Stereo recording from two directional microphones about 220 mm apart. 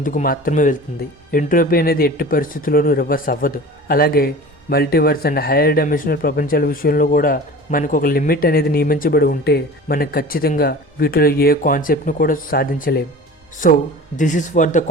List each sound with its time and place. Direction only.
0.0 s speech: 40° left (ahead or behind)